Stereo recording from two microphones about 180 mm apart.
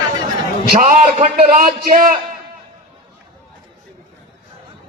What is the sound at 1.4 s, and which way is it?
Speech, 50° right (ahead or behind).